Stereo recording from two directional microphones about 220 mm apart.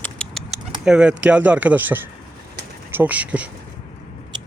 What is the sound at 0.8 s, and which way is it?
Speech, 5° right (ahead or behind).